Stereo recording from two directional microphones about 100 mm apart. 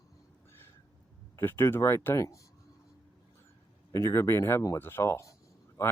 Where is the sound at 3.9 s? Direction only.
30° left (ahead or behind).